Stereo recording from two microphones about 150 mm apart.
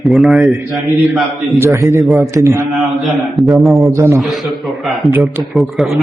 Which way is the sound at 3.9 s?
20° right (ahead or behind).